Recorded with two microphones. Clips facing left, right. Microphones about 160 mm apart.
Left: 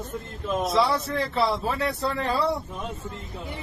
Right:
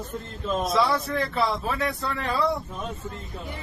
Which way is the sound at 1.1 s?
30° left (ahead or behind).